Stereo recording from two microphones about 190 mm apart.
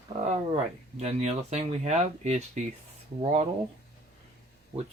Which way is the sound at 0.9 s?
35° right (ahead or behind).